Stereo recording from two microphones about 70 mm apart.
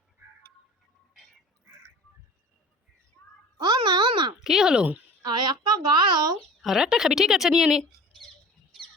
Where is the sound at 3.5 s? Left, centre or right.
Right.